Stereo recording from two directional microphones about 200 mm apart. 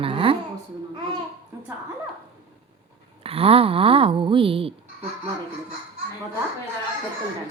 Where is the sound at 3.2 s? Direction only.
30° right (ahead or behind).